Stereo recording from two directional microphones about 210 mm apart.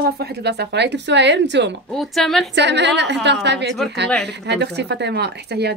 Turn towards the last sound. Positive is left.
turn(degrees=-50)  # may be behind; listen again after turning